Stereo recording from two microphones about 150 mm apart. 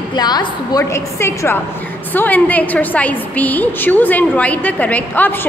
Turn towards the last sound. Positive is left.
turn(degrees=10)  # may be behind; listen again after turning